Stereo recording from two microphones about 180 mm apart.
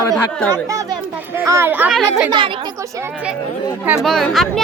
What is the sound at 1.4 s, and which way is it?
A child's voice, 15° right (ahead or behind).